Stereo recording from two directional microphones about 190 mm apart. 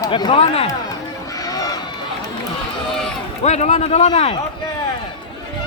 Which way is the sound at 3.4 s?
35° left (ahead or behind).